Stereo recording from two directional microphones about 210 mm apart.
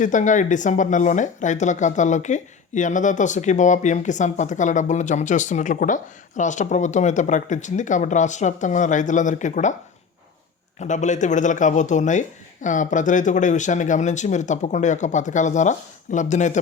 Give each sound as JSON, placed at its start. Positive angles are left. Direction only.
{"t": 0.0, "sound": "speech", "side_deg": 35}
{"t": 10.8, "sound": "speech", "side_deg": 35}